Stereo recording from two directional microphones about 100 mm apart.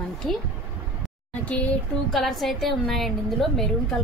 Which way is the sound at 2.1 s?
5° left (ahead or behind).